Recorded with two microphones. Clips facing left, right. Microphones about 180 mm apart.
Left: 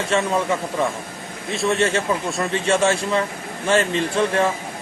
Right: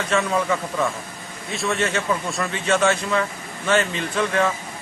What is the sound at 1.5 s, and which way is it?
Speech, centre (ahead or behind).